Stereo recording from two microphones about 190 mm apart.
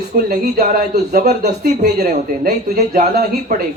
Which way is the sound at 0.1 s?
50° right (ahead or behind).